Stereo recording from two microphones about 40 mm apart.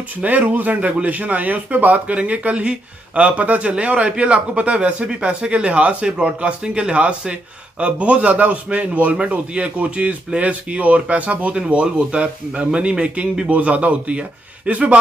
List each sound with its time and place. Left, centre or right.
0.2 s speech: right